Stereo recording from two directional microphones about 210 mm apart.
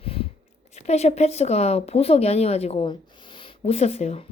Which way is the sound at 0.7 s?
30° left (ahead or behind).